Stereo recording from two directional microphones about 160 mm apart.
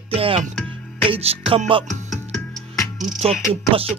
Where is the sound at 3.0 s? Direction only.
40° right (ahead or behind).